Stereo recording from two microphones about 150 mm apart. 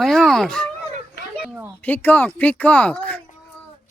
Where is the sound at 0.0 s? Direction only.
Centre (ahead or behind).